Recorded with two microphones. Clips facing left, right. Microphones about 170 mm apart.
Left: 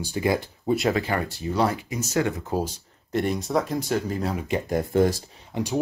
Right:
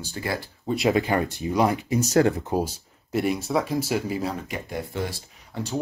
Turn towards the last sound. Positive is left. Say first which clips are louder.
# left 3 dB
turn(degrees=15)  # may be behind; listen again after turning